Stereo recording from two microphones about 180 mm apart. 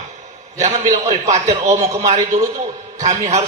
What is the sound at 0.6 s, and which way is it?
A man's voice, 40° right (ahead or behind).